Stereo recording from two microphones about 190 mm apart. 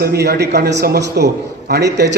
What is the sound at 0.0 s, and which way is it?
A man's voice, 55° right (ahead or behind).